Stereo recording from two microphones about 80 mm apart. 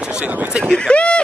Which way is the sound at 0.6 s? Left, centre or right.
Centre.